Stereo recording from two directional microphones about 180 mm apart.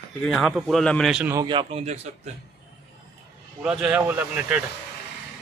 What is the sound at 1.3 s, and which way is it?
Speech, 25° right (ahead or behind).